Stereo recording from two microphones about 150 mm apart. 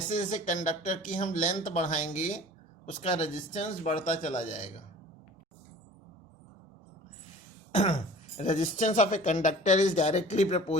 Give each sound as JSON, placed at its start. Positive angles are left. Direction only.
{"t": 0.1, "sound": "speech", "side_deg": 50}
{"t": 7.7, "sound": "speech", "side_deg": 45}